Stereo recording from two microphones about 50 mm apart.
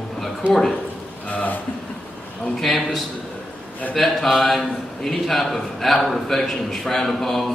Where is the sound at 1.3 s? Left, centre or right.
Left.